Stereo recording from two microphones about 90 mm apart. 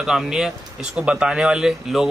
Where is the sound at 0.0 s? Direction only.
5° right (ahead or behind).